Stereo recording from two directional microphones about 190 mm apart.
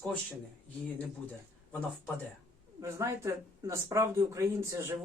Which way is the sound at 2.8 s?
15° right (ahead or behind).